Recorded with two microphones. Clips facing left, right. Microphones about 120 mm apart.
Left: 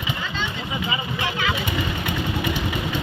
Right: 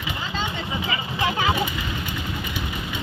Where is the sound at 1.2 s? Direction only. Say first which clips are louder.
Right 4 dB; 35° right (ahead or behind).